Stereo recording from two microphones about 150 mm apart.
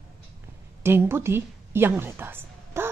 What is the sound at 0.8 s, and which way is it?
A woman's voice, 15° right (ahead or behind).